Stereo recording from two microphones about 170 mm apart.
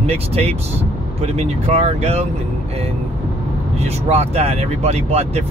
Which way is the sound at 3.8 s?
40° right (ahead or behind).